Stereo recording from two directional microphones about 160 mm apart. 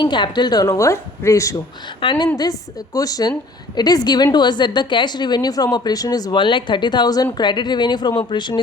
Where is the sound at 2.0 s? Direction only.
30° left (ahead or behind).